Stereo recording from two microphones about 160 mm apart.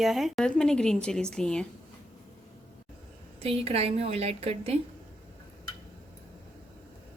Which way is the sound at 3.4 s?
40° right (ahead or behind).